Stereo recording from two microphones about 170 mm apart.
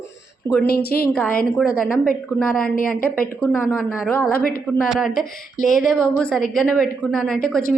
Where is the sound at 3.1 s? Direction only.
10° left (ahead or behind).